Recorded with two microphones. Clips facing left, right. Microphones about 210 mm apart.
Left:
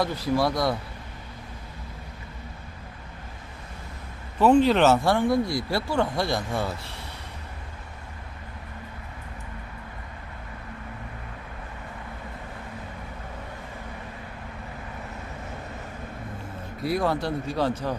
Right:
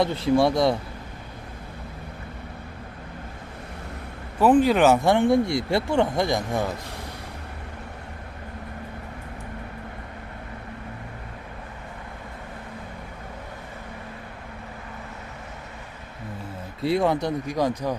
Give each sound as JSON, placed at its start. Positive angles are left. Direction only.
{"t": 0.0, "sound": "speech", "side_deg": -25}
{"t": 4.5, "sound": "speech", "side_deg": -10}
{"t": 5.1, "sound": "speech", "side_deg": -25}
{"t": 16.8, "sound": "speech", "side_deg": -25}